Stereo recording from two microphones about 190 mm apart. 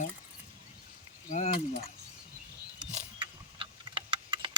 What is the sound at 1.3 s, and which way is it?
Mechanisms, 40° left (ahead or behind).